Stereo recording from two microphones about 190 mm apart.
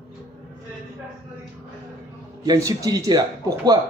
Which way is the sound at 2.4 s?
20° right (ahead or behind).